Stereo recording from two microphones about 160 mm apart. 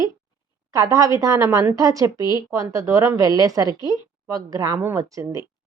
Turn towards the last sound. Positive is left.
turn(degrees=-20)  # may be behind; listen again after turning